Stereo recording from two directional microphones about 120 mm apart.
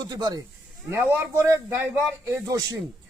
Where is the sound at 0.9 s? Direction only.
20° right (ahead or behind).